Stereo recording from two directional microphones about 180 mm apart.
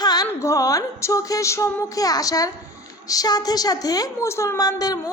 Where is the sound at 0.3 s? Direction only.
15° left (ahead or behind).